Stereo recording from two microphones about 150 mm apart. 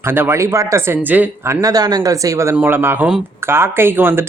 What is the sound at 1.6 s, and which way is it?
Speech, 25° right (ahead or behind).